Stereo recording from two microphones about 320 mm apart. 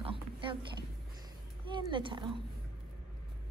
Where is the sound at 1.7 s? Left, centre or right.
Centre.